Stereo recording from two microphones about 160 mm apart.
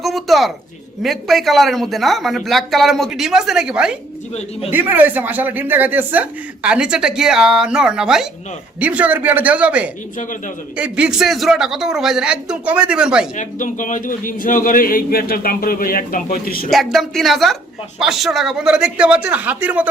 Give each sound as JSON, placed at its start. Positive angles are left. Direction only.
{"t": 0.0, "sound": "a sound", "side_deg": 0}
{"t": 1.0, "sound": "a man's voice", "side_deg": 0}
{"t": 13.3, "sound": "a man's voice", "side_deg": 50}
{"t": 16.6, "sound": "a man's voice", "side_deg": 0}